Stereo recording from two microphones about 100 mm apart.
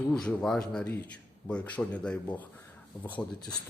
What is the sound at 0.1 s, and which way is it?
A man's voice, 10° left (ahead or behind).